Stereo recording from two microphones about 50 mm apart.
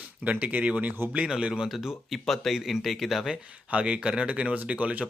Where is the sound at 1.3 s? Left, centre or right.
Centre.